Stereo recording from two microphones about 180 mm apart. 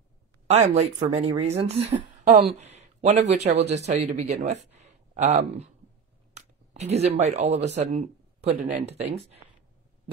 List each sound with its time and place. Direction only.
0.5 s speech: 35° right (ahead or behind)
4.7 s a sound: 40° right (ahead or behind)
6.3 s speech: 35° right (ahead or behind)